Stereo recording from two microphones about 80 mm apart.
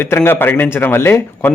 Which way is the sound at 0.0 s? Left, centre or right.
Left.